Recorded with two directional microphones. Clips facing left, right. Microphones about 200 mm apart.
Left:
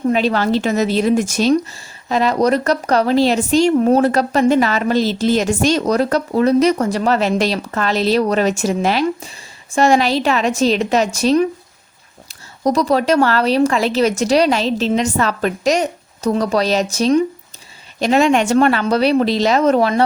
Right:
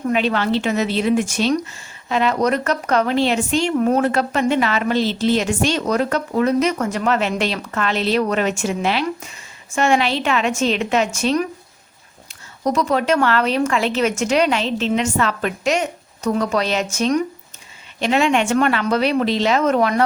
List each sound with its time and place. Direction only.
0.1 s a woman's voice: 35° left (ahead or behind)